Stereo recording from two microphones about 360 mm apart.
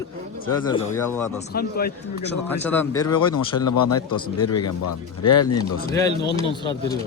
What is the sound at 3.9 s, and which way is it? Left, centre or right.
Speech, left.